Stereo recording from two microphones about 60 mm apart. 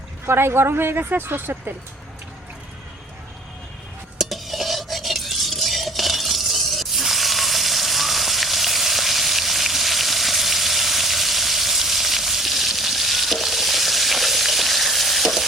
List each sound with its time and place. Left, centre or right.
0.3 s speech: right
4.2 s stir: centre